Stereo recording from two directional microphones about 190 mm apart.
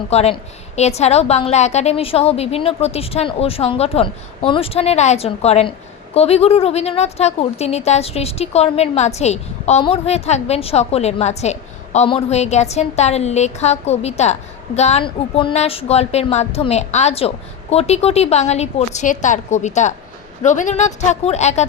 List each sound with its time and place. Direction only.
0.1 s speech: 35° left (ahead or behind)